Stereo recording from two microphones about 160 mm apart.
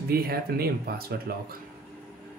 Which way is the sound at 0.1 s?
75° right (ahead or behind).